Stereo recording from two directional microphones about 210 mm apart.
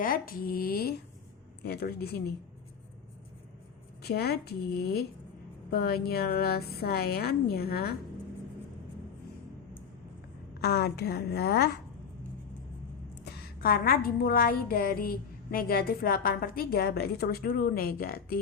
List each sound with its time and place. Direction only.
0.0 s a woman's voice: 45° left (ahead or behind)
4.0 s a woman's voice: 50° left (ahead or behind)
10.6 s a woman's voice: 50° left (ahead or behind)
13.2 s a woman's voice: 45° left (ahead or behind)